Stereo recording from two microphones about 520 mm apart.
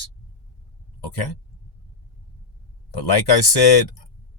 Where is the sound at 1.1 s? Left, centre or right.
Left.